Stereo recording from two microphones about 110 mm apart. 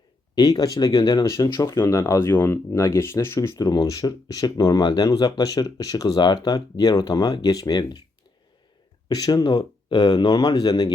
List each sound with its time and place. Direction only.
0.3 s speech: 35° left (ahead or behind)
1.6 s speech: 25° left (ahead or behind)
3.5 s speech: 35° left (ahead or behind)
9.0 s speech: 35° left (ahead or behind)